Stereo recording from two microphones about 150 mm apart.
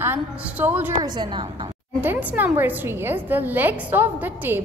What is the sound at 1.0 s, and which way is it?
Speech, 30° right (ahead or behind).